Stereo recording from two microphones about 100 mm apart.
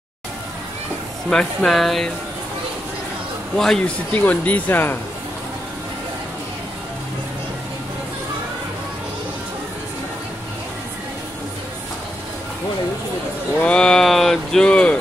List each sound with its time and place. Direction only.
1.3 s speech: 10° left (ahead or behind)
3.5 s speech: 5° left (ahead or behind)
4.1 s speech: 15° left (ahead or behind)
13.6 s speech: 10° left (ahead or behind)